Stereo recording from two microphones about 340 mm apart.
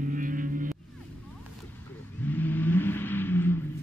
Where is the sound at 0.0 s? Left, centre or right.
Right.